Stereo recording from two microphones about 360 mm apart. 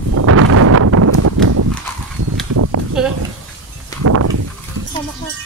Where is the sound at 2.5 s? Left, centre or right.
Right.